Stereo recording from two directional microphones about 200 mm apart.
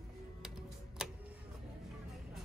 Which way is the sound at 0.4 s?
Centre (ahead or behind).